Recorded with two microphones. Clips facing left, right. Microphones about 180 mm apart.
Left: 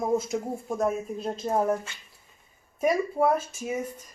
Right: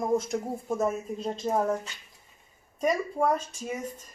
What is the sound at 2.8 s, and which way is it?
Speech, 5° left (ahead or behind).